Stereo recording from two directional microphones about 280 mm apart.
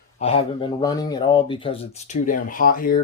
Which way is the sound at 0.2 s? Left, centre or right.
Centre.